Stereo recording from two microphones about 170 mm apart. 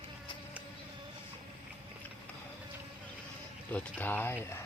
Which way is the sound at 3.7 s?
10° left (ahead or behind).